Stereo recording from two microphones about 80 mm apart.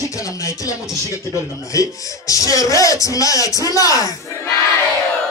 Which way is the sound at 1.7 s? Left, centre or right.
Left.